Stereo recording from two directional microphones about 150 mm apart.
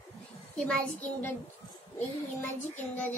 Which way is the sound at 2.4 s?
10° left (ahead or behind).